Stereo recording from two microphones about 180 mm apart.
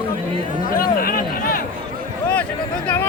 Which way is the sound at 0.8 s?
55° left (ahead or behind).